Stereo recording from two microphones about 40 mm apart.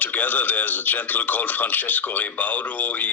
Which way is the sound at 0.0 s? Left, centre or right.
Left.